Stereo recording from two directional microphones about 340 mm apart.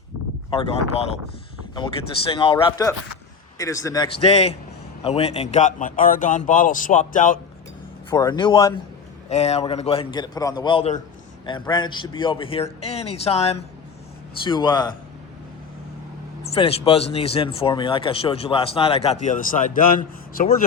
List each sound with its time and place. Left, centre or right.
2.3 s speech: centre
8.1 s speech: centre
16.6 s speech: centre